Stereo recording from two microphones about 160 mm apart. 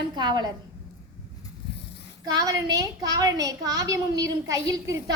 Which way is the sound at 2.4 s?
20° right (ahead or behind).